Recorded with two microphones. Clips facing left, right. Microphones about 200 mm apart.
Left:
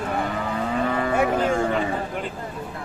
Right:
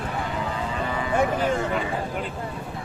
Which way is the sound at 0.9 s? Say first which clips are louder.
Even; 60° left (ahead or behind).